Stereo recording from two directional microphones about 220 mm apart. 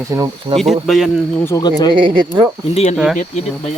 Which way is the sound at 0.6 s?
Centre (ahead or behind).